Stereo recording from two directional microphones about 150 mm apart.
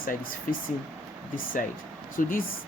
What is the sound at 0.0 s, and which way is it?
Speech, 70° left (ahead or behind).